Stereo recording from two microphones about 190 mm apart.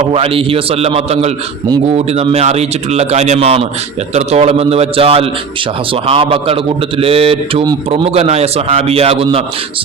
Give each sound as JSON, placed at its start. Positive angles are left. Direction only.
{"t": 0.1, "sound": "a man's voice", "side_deg": -30}